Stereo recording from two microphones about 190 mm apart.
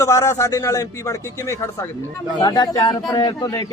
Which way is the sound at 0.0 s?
15° left (ahead or behind).